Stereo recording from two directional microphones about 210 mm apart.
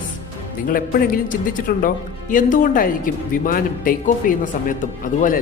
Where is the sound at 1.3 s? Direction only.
40° left (ahead or behind).